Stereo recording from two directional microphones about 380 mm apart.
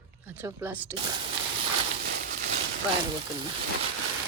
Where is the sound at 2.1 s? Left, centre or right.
Right.